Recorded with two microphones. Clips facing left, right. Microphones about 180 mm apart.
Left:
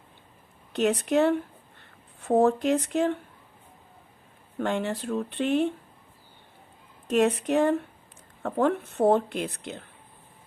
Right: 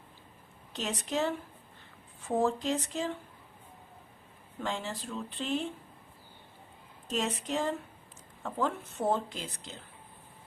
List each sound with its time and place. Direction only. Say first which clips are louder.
0.7 s a woman's voice: left 11 dB; 60° left (ahead or behind)
4.5 s a woman's voice: left 8 dB; 60° left (ahead or behind)
7.1 s a woman's voice: left 10 dB; 60° left (ahead or behind)